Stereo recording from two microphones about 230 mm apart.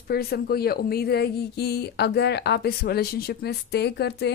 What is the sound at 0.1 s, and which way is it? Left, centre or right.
A woman's voice, left.